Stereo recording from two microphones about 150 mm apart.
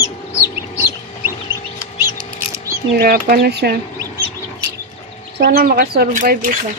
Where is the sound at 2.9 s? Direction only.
85° right.